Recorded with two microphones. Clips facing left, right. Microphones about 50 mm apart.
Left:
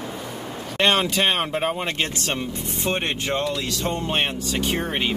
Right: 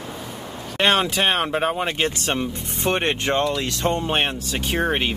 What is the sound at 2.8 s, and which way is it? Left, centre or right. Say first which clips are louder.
Speech: right 4 dB; right.